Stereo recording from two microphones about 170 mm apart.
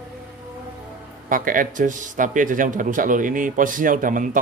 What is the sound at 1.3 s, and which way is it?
Speech, 55° right (ahead or behind).